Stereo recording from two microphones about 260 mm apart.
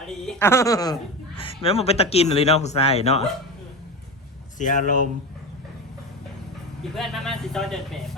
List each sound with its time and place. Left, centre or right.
0.3 s speech: centre
4.5 s speech: left
6.9 s speech: centre